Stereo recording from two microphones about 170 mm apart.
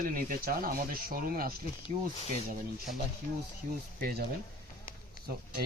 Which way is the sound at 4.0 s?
60° right (ahead or behind).